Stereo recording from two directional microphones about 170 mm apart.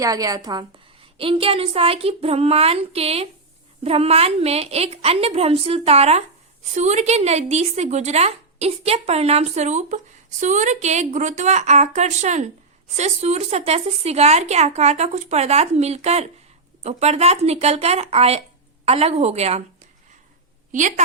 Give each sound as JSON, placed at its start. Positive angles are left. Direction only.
{"t": 0.0, "sound": "a woman's voice", "side_deg": -20}
{"t": 1.2, "sound": "a woman's voice", "side_deg": -35}